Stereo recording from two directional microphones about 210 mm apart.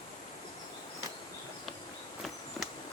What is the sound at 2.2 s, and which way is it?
Insect, centre (ahead or behind).